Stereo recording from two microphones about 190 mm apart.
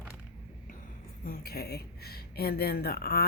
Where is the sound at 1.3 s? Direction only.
55° left (ahead or behind).